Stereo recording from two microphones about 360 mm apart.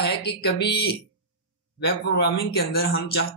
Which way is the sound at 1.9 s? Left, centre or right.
Left.